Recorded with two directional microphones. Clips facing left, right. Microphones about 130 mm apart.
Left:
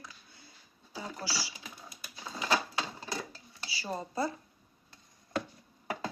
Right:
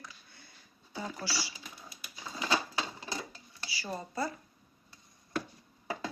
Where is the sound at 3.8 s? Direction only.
20° left (ahead or behind).